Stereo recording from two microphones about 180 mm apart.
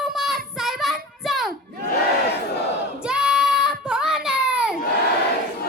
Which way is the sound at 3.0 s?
5° right (ahead or behind).